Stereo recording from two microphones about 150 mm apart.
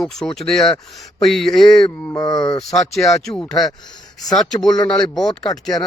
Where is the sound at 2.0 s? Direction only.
25° left (ahead or behind).